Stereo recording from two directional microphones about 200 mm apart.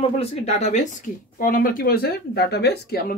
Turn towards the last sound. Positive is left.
turn(degrees=50)  # may be behind; listen again after turning